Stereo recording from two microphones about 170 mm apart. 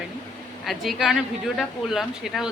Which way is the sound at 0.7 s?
Centre (ahead or behind).